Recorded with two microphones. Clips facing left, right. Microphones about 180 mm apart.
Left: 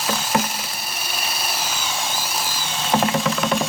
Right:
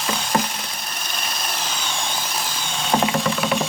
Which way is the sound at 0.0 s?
5° left (ahead or behind).